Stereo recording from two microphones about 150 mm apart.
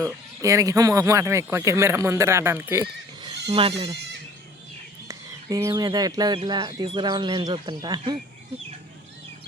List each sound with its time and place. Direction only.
0.0 s speech: 20° right (ahead or behind)
3.5 s speech: 35° right (ahead or behind)
5.0 s speech: 20° right (ahead or behind)